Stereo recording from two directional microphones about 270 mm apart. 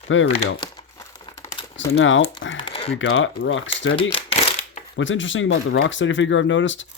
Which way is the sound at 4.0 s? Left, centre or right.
Left.